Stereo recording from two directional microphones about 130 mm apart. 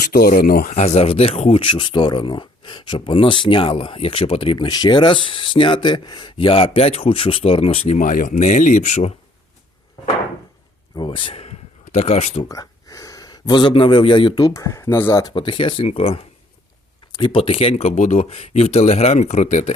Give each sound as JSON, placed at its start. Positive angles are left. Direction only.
{"t": 0.2, "sound": "speech", "side_deg": 90}
{"t": 0.8, "sound": "speech", "side_deg": 55}
{"t": 10.9, "sound": "speech", "side_deg": 40}
{"t": 12.5, "sound": "speech", "side_deg": 25}
{"t": 15.2, "sound": "speech", "side_deg": 40}
{"t": 17.1, "sound": "speech", "side_deg": 35}